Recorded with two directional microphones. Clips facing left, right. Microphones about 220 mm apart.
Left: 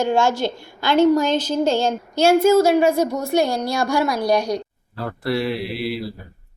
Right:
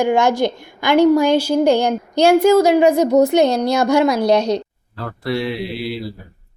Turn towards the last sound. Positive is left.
turn(degrees=0)  # may be behind; listen again after turning